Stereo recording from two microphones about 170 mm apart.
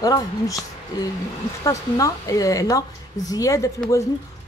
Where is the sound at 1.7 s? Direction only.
20° left (ahead or behind).